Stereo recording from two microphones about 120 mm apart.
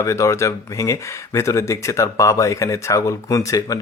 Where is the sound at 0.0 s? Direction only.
25° left (ahead or behind).